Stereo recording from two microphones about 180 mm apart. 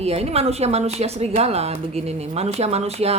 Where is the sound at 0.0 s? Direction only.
35° right (ahead or behind).